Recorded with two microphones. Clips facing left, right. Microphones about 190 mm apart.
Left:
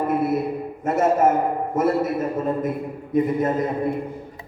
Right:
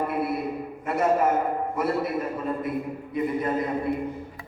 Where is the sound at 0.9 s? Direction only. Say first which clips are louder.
Left 4 dB; 45° left (ahead or behind).